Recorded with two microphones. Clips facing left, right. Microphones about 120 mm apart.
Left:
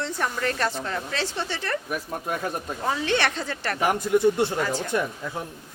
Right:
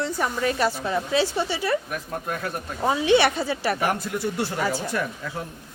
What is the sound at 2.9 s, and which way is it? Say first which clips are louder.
Speech: right 6 dB; 10° right (ahead or behind).